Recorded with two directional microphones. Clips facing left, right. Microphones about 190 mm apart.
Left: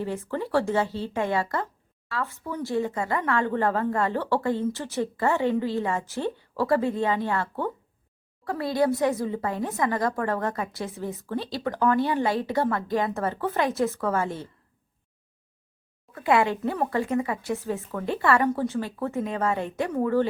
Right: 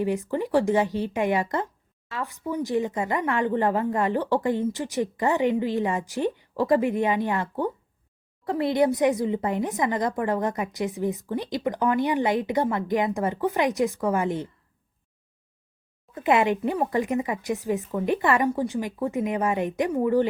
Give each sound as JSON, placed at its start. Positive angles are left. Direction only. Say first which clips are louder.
{"t": 0.0, "sound": "speech", "louder": "right 4 dB", "side_deg": -15}
{"t": 16.1, "sound": "speech", "louder": "right 1 dB", "side_deg": -20}